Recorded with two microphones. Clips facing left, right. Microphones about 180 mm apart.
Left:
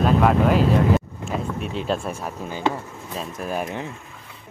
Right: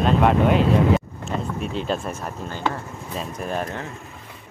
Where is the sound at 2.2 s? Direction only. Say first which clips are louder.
Left 1 dB; 10° left (ahead or behind).